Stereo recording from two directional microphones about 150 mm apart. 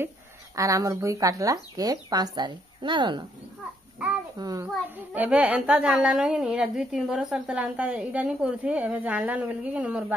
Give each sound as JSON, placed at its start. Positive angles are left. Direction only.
{"t": 0.6, "sound": "speech", "side_deg": -20}
{"t": 4.4, "sound": "speech", "side_deg": -25}
{"t": 4.9, "sound": "a woman's voice", "side_deg": -10}